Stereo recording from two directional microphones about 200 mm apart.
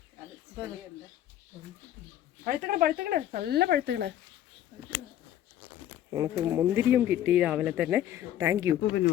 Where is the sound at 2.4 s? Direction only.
45° right (ahead or behind).